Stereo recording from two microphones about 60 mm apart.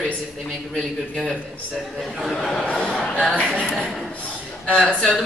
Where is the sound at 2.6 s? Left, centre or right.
Left.